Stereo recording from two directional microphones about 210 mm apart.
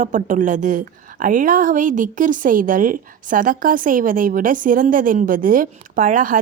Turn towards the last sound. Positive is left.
turn(degrees=-40)  # may be behind; listen again after turning